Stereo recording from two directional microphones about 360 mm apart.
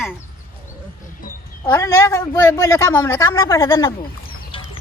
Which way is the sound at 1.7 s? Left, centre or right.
Centre.